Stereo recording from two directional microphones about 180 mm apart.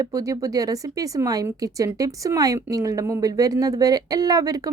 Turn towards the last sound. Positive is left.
turn(degrees=-20)  # may be behind; listen again after turning